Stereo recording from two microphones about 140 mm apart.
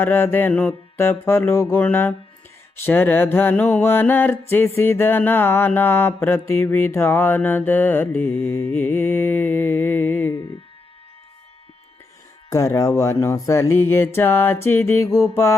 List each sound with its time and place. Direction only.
0.0 s mantra: 15° left (ahead or behind)
12.5 s mantra: 25° left (ahead or behind)